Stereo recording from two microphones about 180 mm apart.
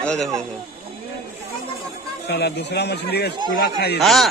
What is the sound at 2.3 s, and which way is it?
Speech, 65° left (ahead or behind).